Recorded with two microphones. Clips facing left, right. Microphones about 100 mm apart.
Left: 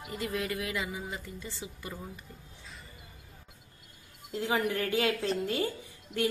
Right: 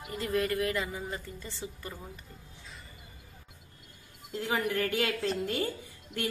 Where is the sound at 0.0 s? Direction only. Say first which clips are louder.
Right 3 dB; centre (ahead or behind).